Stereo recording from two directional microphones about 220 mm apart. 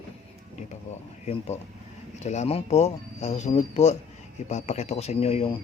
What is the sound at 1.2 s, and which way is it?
A man's voice, 30° left (ahead or behind).